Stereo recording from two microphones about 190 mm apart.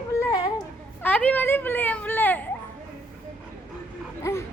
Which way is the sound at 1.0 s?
10° left (ahead or behind).